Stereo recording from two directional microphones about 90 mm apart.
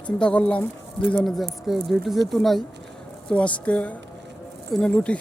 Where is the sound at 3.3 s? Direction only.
15° left (ahead or behind).